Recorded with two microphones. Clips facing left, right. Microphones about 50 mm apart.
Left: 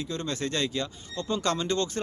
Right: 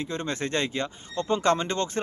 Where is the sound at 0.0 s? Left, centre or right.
Right.